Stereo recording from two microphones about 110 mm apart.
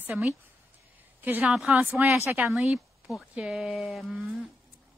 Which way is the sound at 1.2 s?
15° right (ahead or behind).